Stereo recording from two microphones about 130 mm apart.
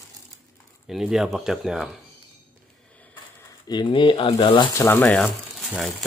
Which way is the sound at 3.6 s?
35° left (ahead or behind).